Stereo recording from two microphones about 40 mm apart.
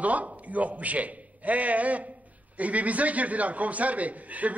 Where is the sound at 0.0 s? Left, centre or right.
Right.